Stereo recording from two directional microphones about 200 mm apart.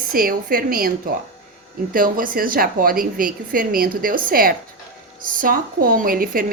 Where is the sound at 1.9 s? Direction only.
45° right (ahead or behind).